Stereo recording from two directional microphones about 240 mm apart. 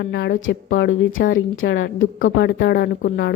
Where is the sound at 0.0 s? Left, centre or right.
Left.